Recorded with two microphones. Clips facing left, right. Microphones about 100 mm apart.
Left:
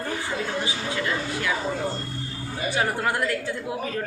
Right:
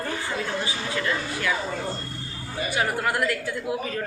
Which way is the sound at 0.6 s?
20° left (ahead or behind).